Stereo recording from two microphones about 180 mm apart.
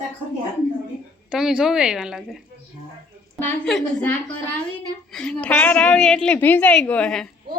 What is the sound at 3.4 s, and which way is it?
Speech, 5° left (ahead or behind).